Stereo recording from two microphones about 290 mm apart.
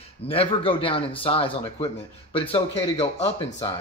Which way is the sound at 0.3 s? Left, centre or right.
Centre.